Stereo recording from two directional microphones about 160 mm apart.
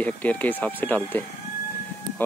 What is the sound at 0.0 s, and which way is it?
Speech, 10° left (ahead or behind).